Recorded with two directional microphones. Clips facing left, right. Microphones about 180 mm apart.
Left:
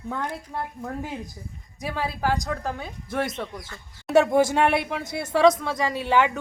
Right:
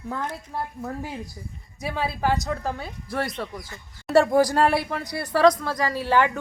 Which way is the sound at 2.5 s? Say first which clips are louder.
Right 1 dB; centre (ahead or behind).